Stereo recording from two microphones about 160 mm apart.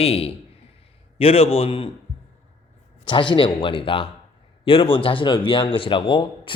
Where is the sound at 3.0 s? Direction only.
30° left (ahead or behind).